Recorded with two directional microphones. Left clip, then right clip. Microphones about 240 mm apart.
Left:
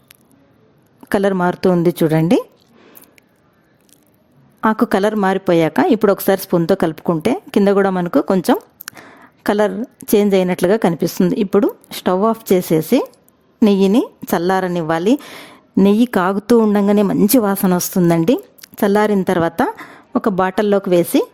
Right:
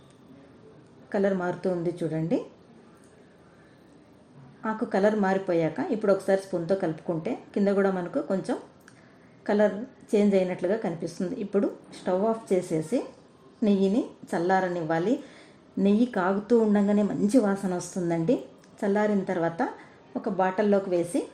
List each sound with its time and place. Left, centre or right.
1.1 s a woman's voice: left
4.6 s a woman's voice: left